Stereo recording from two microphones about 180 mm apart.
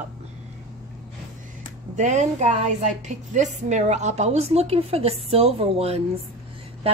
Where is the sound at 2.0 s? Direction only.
40° right (ahead or behind).